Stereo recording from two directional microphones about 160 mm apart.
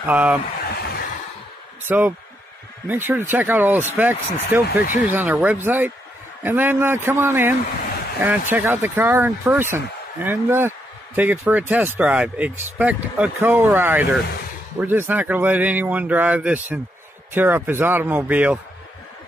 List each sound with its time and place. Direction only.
0.0 s speech: 10° right (ahead or behind)
0.7 s a sound: 80° left
1.9 s speech: 10° right (ahead or behind)